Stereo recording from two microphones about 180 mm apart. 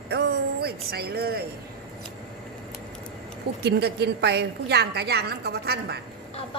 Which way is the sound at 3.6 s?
65° right (ahead or behind).